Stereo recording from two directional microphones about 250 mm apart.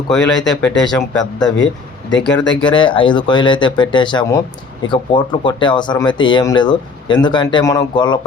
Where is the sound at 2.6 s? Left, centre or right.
Centre.